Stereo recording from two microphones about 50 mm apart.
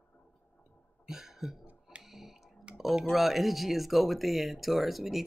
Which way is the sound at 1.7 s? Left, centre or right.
Right.